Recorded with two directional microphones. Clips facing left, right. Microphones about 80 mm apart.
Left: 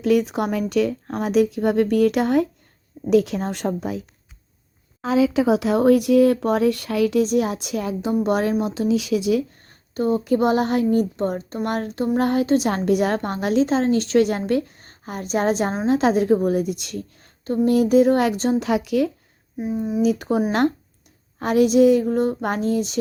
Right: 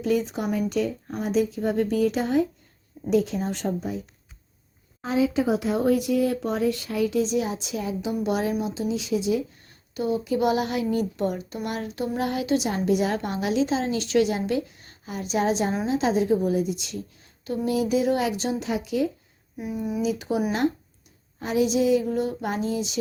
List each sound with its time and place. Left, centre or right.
0.0 s speech: left
5.3 s a woman's voice: left
8.4 s speech: left
9.6 s a woman's voice: left
12.7 s a woman's voice: left
18.6 s speech: left
19.5 s speech: left
20.0 s a woman's voice: left
21.3 s a woman's voice: left